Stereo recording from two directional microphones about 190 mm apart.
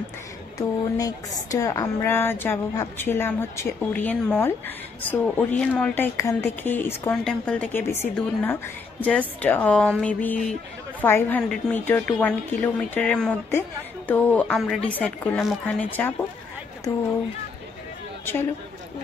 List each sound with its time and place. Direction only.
0.6 s a woman's voice: 20° left (ahead or behind)
18.2 s speech: 10° left (ahead or behind)